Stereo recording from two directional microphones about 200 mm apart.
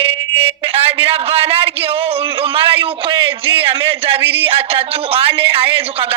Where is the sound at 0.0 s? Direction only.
30° right (ahead or behind).